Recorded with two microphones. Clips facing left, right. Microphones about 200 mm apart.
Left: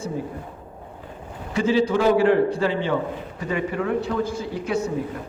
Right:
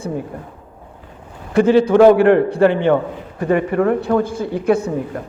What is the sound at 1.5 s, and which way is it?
A man's voice, 60° right (ahead or behind).